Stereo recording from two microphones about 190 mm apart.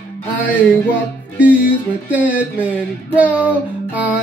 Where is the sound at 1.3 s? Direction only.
5° right (ahead or behind).